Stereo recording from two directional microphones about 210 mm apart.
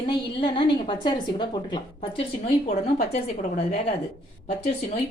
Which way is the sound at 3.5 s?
35° left (ahead or behind).